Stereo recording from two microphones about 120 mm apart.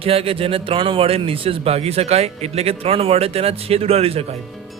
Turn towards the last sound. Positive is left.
turn(degrees=-55)  # may be behind; listen again after turning